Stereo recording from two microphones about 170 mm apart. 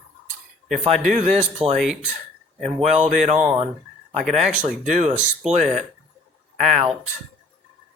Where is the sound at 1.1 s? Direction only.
45° right (ahead or behind).